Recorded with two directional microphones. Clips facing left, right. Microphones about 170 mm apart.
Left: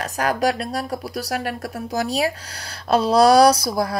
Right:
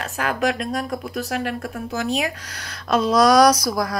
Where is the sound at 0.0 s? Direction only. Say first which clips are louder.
Left 2 dB; 40° left (ahead or behind).